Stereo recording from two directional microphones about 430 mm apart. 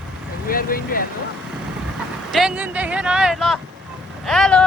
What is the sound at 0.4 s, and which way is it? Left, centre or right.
Speech, centre.